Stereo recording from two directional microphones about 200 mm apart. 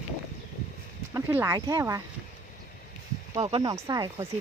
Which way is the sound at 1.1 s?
10° right (ahead or behind).